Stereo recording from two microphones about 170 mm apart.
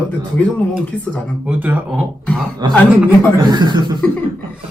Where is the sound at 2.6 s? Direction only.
25° right (ahead or behind).